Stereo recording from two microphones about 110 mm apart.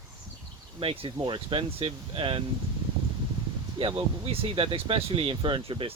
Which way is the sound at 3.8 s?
50° right (ahead or behind).